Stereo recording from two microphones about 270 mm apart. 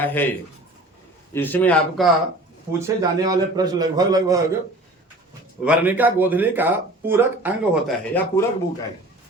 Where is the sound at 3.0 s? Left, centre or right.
Centre.